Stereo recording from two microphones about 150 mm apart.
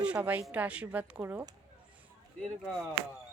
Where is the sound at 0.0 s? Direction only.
10° right (ahead or behind).